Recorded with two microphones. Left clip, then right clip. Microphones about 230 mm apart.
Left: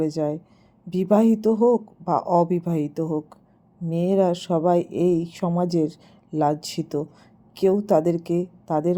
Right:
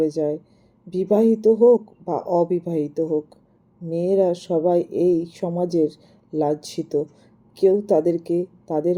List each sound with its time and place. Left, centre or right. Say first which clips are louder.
0.0 s speech: right 3 dB; left
3.0 s speech: right 7 dB; left
3.8 s speech: right 2 dB; left